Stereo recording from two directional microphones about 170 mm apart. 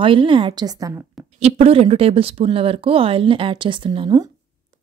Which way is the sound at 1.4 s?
35° right (ahead or behind).